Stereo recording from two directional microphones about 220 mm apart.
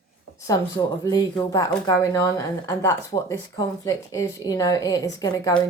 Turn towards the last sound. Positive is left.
turn(degrees=15)  # may be behind; listen again after turning